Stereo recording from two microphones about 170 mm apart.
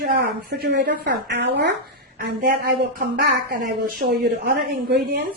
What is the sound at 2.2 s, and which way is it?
Speech, 60° right (ahead or behind).